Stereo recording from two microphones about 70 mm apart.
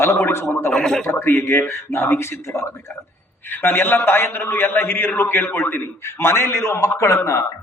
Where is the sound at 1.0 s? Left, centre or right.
Left.